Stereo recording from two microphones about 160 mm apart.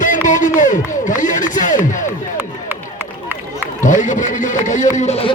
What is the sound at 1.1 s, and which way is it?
Music, 55° left (ahead or behind).